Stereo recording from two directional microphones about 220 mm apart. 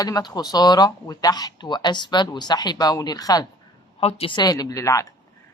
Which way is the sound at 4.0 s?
25° left (ahead or behind).